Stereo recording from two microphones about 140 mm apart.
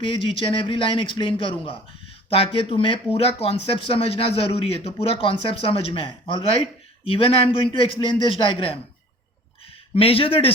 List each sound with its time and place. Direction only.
0.0 s a man's voice: 40° left (ahead or behind)
9.9 s a man's voice: 40° left (ahead or behind)